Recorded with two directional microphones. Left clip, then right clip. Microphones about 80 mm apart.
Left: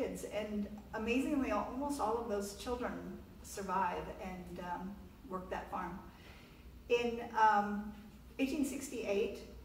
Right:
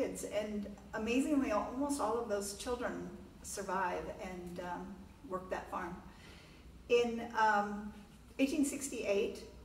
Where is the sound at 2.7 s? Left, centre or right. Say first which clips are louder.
Right 3 dB; centre.